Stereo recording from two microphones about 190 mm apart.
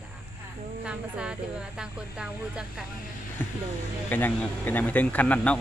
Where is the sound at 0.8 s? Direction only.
5° right (ahead or behind).